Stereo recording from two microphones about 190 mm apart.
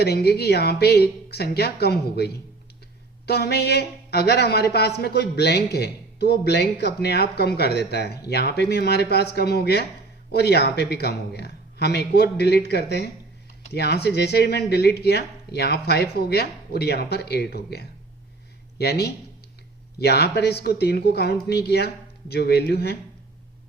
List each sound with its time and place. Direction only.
0.0 s speech: 60° left (ahead or behind)